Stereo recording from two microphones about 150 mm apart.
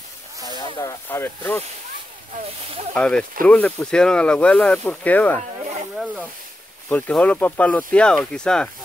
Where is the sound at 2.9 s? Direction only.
5° left (ahead or behind).